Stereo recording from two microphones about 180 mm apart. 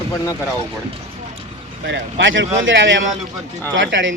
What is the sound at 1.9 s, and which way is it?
A man's voice, 90° right.